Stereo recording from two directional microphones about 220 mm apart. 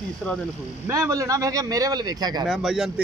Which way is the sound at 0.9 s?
15° right (ahead or behind).